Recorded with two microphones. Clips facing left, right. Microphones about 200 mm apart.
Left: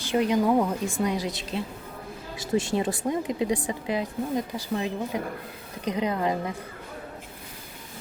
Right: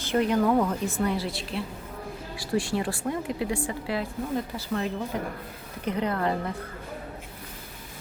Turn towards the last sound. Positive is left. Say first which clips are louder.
# left 1 dB
turn(degrees=15)  # may be behind; listen again after turning